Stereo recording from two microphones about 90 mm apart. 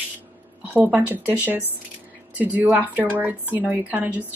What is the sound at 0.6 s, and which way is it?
A woman's voice, 20° right (ahead or behind).